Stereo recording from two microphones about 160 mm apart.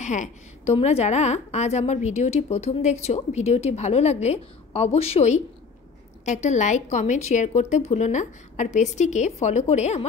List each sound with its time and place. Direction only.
0.0 s a woman's voice: 50° left (ahead or behind)